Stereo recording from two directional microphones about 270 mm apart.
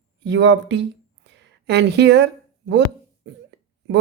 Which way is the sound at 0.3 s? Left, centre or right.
Right.